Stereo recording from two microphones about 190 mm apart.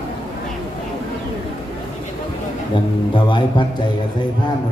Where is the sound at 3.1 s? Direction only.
25° left (ahead or behind).